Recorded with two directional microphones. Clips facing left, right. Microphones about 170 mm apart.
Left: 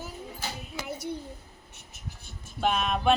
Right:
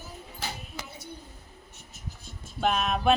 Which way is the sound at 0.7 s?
90° left.